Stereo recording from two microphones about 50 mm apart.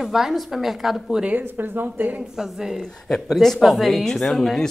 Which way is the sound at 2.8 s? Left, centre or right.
Centre.